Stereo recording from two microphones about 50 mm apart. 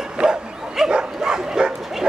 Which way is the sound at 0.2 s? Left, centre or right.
Centre.